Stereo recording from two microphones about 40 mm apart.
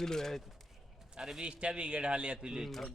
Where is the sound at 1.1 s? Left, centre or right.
Centre.